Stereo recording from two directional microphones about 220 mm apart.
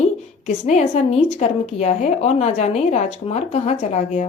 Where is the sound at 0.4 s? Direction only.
30° left (ahead or behind).